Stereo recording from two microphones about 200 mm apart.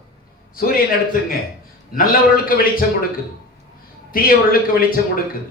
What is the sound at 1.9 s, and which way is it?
Speech, 45° left (ahead or behind).